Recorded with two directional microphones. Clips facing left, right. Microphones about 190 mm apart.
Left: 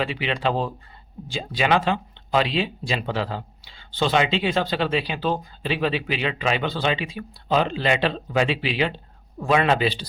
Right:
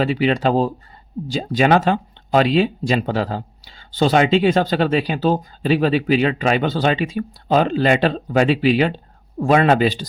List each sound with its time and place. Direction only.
0.0 s speech: 40° right (ahead or behind)